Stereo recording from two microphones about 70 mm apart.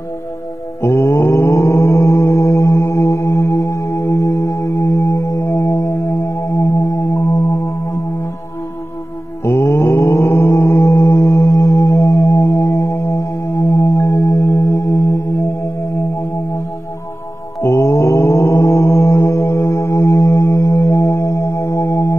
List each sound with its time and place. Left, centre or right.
0.8 s mantra: left
5.5 s music: left
9.4 s mantra: left
13.8 s singing bowl: left
14.8 s music: left
17.6 s mantra: left